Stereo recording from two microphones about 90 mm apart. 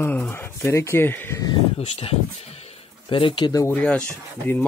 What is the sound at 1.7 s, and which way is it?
Speech, 90° left.